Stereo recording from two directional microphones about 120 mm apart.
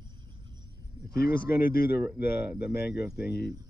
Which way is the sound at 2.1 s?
10° right (ahead or behind).